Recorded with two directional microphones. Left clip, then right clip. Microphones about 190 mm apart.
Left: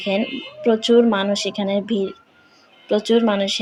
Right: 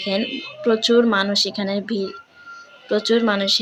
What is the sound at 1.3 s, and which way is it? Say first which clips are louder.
Speech: even; 35° right (ahead or behind).